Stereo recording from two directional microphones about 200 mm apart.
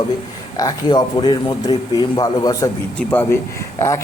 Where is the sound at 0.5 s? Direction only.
20° left (ahead or behind).